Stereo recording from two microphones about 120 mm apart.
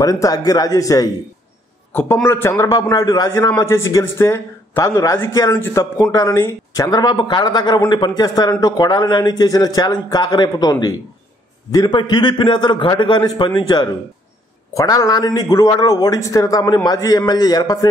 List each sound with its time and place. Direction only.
0.0 s speech: 30° left (ahead or behind)
1.9 s a man's voice: 20° left (ahead or behind)